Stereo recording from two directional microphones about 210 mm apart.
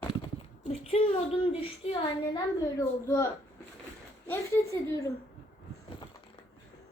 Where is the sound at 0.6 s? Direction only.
30° left (ahead or behind).